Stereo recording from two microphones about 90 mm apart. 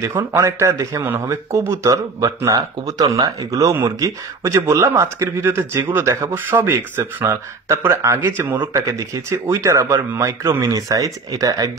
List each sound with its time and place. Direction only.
0.0 s a man's voice: 30° right (ahead or behind)
8.7 s speech: 35° right (ahead or behind)